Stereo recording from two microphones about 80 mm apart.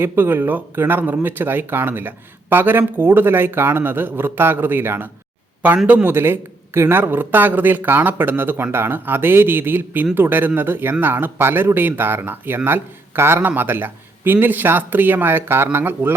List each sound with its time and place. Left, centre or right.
0.0 s speech: right
6.1 s speech: right